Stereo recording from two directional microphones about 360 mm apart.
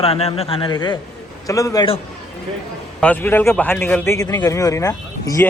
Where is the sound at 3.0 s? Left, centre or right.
Centre.